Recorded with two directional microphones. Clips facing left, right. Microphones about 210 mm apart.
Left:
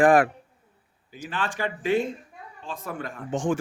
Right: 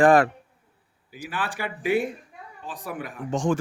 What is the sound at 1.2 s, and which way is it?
A man's voice, 15° right (ahead or behind).